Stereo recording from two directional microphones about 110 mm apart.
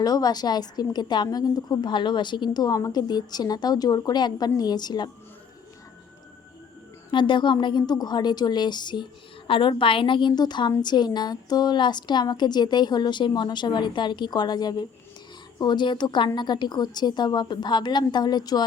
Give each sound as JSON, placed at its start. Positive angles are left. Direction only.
{"t": 0.0, "sound": "a woman's voice", "side_deg": 35}
{"t": 7.1, "sound": "a woman's voice", "side_deg": 45}